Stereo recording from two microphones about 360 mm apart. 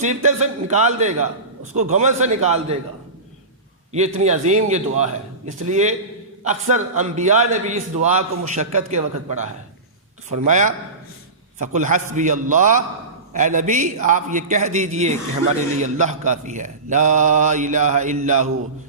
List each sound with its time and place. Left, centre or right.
0.0 s a man's voice: centre
3.9 s a man's voice: centre